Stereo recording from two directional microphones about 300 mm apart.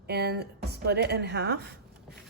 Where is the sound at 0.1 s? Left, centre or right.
Right.